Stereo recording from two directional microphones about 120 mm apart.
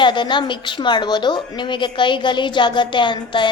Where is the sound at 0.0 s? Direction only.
40° left (ahead or behind).